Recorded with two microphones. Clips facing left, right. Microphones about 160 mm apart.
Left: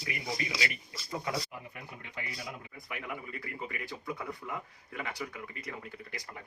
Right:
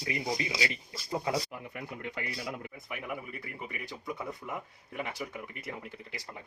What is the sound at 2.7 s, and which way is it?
A man's voice, 20° right (ahead or behind).